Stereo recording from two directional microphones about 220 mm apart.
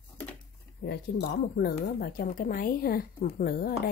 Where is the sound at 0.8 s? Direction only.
50° left (ahead or behind).